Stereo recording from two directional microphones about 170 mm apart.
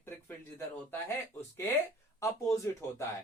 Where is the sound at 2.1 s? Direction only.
15° left (ahead or behind).